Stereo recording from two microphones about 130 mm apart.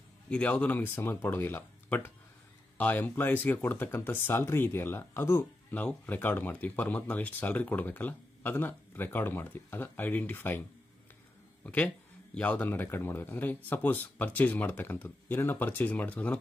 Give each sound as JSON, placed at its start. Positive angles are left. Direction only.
{"t": 0.3, "sound": "speech", "side_deg": 10}
{"t": 11.6, "sound": "speech", "side_deg": 10}